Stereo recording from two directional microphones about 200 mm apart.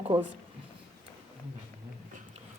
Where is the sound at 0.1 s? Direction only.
25° right (ahead or behind).